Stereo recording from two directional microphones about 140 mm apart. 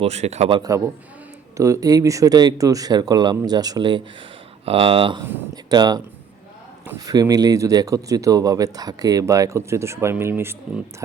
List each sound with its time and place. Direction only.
0.0 s a man's voice: 50° right (ahead or behind)
0.5 s speech: 25° right (ahead or behind)
7.0 s speech: 25° right (ahead or behind)